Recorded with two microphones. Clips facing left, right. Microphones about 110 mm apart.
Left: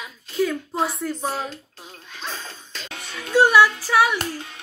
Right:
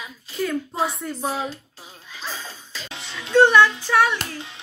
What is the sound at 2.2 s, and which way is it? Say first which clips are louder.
Music: even; 5° right (ahead or behind).